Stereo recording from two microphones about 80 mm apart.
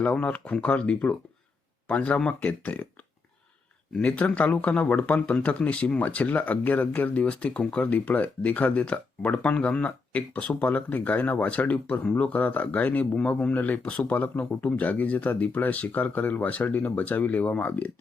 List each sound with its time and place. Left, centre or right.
0.0 s speech: centre
3.9 s speech: centre